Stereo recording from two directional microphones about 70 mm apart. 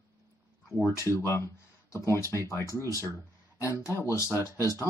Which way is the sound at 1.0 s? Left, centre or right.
Left.